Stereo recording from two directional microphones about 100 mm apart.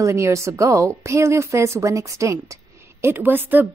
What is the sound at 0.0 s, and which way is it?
A woman's voice, 30° right (ahead or behind).